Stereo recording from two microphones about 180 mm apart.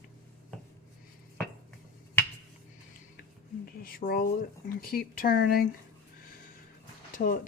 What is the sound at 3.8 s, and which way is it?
Speech, 55° left (ahead or behind).